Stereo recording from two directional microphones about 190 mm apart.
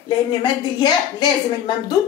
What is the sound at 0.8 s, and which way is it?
Speech, 20° left (ahead or behind).